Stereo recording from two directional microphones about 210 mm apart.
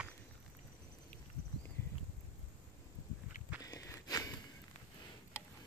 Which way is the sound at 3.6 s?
15° left (ahead or behind).